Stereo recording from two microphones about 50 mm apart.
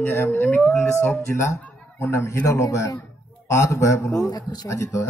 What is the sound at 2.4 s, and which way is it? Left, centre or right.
A man's voice, left.